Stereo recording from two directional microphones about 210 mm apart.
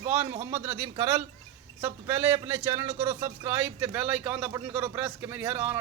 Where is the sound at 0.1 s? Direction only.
10° right (ahead or behind).